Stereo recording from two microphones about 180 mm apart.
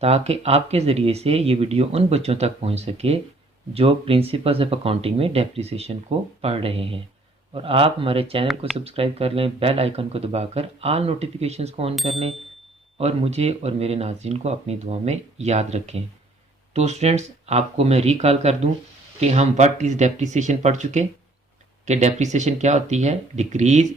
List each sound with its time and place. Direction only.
0.0 s speech: 35° right (ahead or behind)